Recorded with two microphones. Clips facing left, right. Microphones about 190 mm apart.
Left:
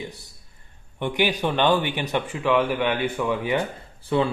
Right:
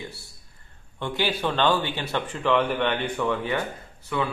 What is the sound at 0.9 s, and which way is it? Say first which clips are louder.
A man's voice: left 3 dB; 15° left (ahead or behind).